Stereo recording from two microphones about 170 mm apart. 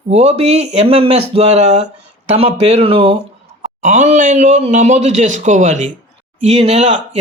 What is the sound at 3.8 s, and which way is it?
Speech, 45° right (ahead or behind).